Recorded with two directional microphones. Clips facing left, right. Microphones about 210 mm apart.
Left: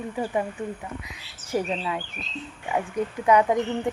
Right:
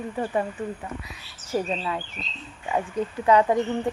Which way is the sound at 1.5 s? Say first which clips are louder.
Even; 15° left (ahead or behind).